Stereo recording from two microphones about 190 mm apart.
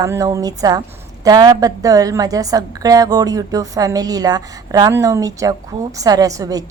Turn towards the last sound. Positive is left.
turn(degrees=-20)  # may be behind; listen again after turning